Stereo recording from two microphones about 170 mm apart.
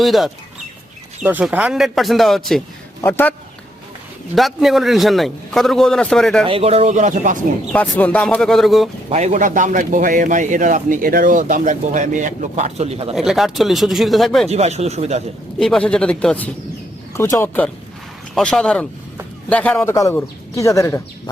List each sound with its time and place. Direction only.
0.0 s a man's voice: centre (ahead or behind)
3.0 s a man's voice: 10° left (ahead or behind)
4.4 s a man's voice: centre (ahead or behind)
6.4 s speech: 35° right (ahead or behind)
7.7 s a man's voice: 10° left (ahead or behind)
9.0 s a man's voice: 40° right (ahead or behind)
13.1 s a man's voice: centre (ahead or behind)
14.4 s speech: 40° right (ahead or behind)
15.5 s a man's voice: 5° left (ahead or behind)
17.2 s a man's voice: 15° left (ahead or behind)